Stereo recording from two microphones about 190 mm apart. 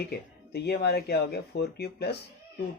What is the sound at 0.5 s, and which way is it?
Speech, 60° left (ahead or behind).